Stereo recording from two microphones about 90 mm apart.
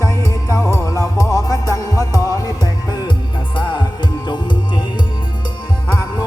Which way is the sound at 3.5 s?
60° left (ahead or behind).